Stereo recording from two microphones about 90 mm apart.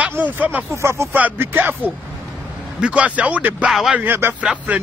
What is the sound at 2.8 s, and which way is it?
Speech, 15° right (ahead or behind).